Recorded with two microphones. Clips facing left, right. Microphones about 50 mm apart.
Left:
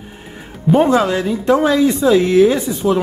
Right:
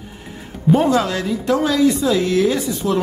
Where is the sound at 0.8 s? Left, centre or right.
Left.